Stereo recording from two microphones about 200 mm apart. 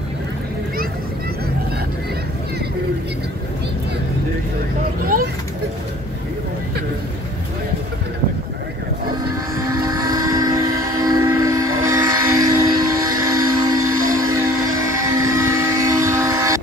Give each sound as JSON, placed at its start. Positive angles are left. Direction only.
{"t": 9.7, "sound": "train", "side_deg": -15}
{"t": 14.3, "sound": "music", "side_deg": -15}